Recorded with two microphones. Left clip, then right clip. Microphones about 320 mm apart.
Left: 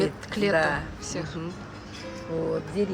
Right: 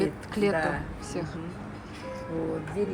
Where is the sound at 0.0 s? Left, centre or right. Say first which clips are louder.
Left 1 dB; centre.